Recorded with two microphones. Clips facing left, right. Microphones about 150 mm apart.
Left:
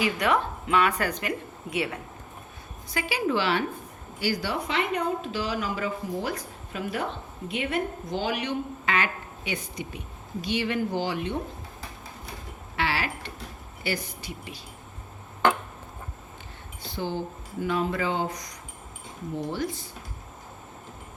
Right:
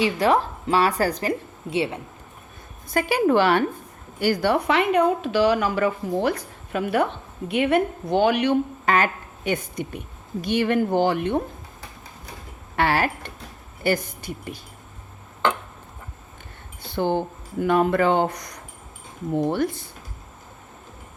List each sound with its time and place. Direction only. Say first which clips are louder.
0.0 s speech: right 5 dB; 35° right (ahead or behind)
2.9 s a woman's voice: right 8 dB; 50° right (ahead or behind)
8.9 s a woman's voice: right 6 dB; 45° right (ahead or behind)
12.7 s a sound: right 7 dB; 50° right (ahead or behind)
13.8 s speech: right 8 dB; 50° right (ahead or behind)
16.9 s a woman's voice: right 8 dB; 60° right (ahead or behind)